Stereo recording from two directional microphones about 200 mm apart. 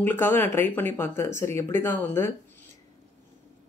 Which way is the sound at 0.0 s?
10° left (ahead or behind).